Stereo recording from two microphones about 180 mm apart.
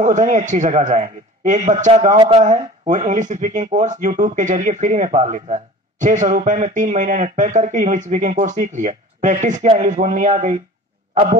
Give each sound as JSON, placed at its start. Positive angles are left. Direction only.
{"t": 0.0, "sound": "speech", "side_deg": -45}
{"t": 2.1, "sound": "speech", "side_deg": -30}